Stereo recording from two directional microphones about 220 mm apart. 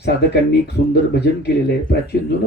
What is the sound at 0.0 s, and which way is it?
Speech, 50° left (ahead or behind).